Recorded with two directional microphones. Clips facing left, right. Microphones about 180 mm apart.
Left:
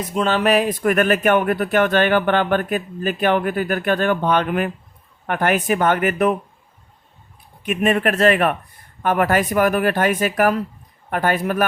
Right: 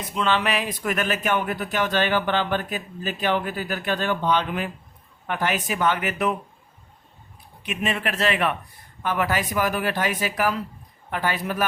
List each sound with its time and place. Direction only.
0.0 s speech: 45° left (ahead or behind)
7.6 s speech: 50° left (ahead or behind)